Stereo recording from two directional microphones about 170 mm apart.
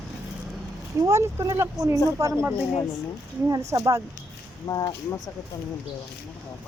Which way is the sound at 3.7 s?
20° right (ahead or behind).